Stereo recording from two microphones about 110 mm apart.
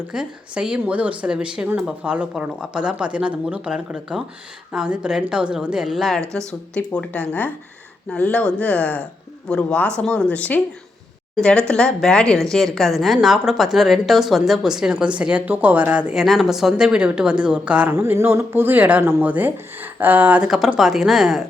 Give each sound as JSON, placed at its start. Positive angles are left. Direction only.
{"t": 0.1, "sound": "a woman's voice", "side_deg": -5}
{"t": 17.9, "sound": "speech", "side_deg": -20}